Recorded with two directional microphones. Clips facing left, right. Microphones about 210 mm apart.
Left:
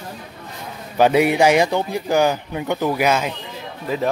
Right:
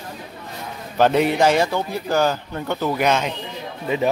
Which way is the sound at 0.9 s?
10° left (ahead or behind).